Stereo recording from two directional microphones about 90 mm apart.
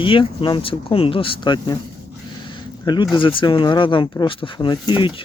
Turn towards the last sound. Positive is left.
turn(degrees=60)  # may be behind; listen again after turning